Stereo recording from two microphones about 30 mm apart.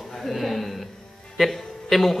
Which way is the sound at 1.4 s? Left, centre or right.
Centre.